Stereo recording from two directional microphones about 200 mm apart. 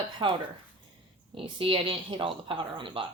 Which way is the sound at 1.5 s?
25° right (ahead or behind).